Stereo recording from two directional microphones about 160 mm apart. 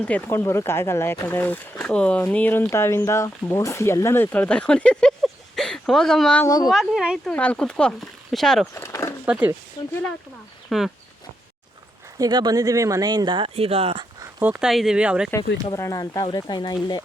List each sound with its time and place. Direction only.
0.0 s speech: 10° left (ahead or behind)
6.4 s speech: 25° left (ahead or behind)
6.7 s speech: centre (ahead or behind)
7.3 s speech: 10° left (ahead or behind)
8.7 s a sound: 20° left (ahead or behind)
9.2 s speech: 10° right (ahead or behind)
10.7 s speech: centre (ahead or behind)
12.1 s speech: 25° right (ahead or behind)
14.4 s speech: 5° right (ahead or behind)
15.7 s speech: 20° left (ahead or behind)